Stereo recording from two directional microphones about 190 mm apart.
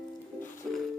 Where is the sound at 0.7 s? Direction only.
Centre (ahead or behind).